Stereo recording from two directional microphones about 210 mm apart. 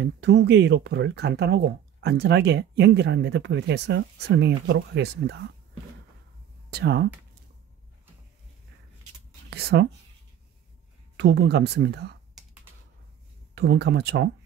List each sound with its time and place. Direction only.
0.0 s speech: 55° right (ahead or behind)
6.7 s speech: 55° right (ahead or behind)
9.5 s speech: 50° right (ahead or behind)
11.1 s speech: 55° right (ahead or behind)
13.6 s speech: 50° right (ahead or behind)